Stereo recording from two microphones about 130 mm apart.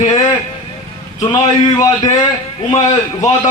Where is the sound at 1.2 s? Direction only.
35° left (ahead or behind).